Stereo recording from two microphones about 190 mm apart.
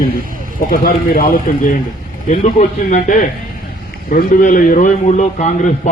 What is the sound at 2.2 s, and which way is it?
A man's voice, 40° left (ahead or behind).